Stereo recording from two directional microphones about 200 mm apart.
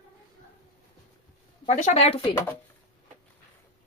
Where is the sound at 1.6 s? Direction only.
35° left (ahead or behind).